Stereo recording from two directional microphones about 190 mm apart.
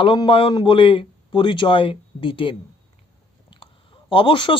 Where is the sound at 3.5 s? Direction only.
25° left (ahead or behind).